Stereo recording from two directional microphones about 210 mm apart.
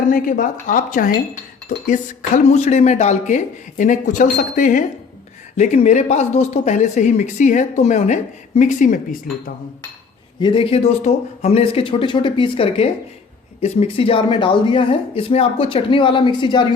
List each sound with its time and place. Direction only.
0.1 s speech: 40° left (ahead or behind)
10.4 s speech: 25° left (ahead or behind)